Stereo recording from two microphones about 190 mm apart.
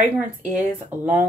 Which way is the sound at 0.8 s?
10° right (ahead or behind).